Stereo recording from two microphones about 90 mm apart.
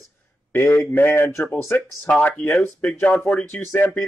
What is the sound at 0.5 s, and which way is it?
Speech, 25° left (ahead or behind).